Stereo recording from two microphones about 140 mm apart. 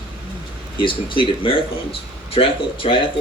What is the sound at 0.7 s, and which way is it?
Speech, 35° left (ahead or behind).